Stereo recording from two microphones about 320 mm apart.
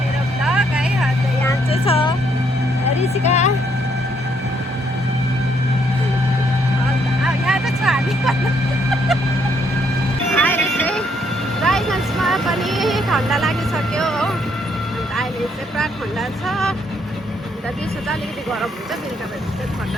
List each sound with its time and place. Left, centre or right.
0.4 s vehicle: centre
1.7 s vehicle: centre
3.0 s a sound: left
7.3 s vehicle: centre
10.3 s vehicle: centre
16.5 s vehicle: centre